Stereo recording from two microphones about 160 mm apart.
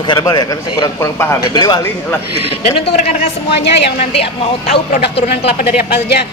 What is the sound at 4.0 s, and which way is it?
Speech, 35° left (ahead or behind).